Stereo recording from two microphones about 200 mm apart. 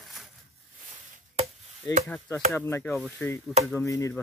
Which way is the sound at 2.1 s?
5° left (ahead or behind).